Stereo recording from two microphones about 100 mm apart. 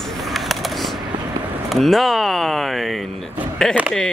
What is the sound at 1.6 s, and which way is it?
Speech, centre (ahead or behind).